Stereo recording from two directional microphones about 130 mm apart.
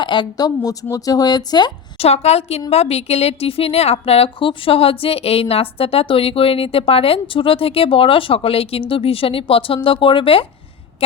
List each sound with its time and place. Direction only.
0.0 s speech: 35° left (ahead or behind)
2.0 s a woman's voice: 55° left (ahead or behind)